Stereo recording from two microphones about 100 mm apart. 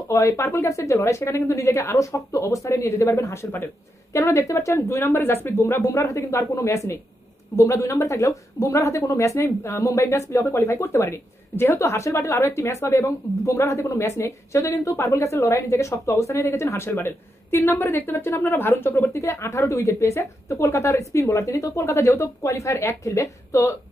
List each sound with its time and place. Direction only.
0.1 s speech: 30° left (ahead or behind)